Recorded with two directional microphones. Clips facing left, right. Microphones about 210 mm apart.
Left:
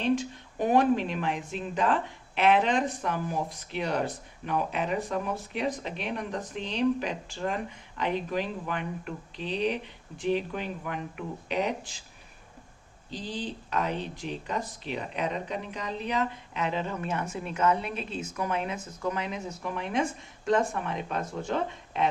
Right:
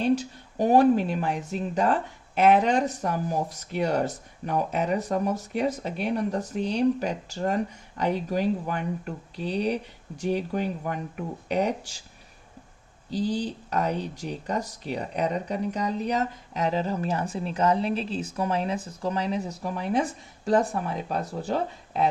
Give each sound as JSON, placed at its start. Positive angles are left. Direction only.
{"t": 0.0, "sound": "speech", "side_deg": -40}
{"t": 13.1, "sound": "speech", "side_deg": -40}